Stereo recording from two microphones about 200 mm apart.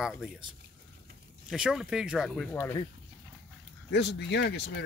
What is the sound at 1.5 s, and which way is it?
Speech, 5° right (ahead or behind).